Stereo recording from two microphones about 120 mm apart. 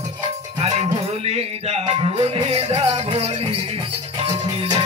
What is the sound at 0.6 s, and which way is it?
Music, 60° right (ahead or behind).